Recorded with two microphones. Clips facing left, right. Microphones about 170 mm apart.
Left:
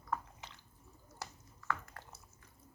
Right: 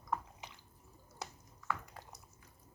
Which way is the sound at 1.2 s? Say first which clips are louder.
Right 1 dB; 15° right (ahead or behind).